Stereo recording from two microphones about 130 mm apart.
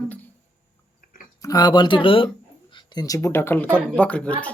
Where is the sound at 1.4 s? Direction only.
30° left (ahead or behind).